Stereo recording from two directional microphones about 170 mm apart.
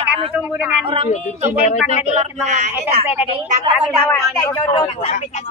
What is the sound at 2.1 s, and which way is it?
Speech, 40° right (ahead or behind).